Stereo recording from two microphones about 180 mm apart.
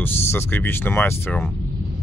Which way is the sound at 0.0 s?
10° left (ahead or behind).